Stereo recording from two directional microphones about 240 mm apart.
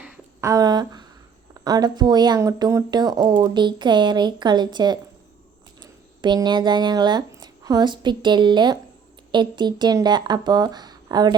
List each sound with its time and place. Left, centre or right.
0.0 s a sound: centre
1.6 s a woman's voice: centre
6.2 s a woman's voice: centre